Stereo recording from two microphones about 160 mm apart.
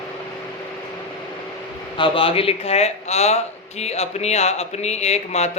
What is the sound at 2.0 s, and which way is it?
A man's voice, 35° left (ahead or behind).